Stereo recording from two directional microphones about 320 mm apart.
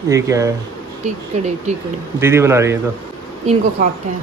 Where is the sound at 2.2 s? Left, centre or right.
Centre.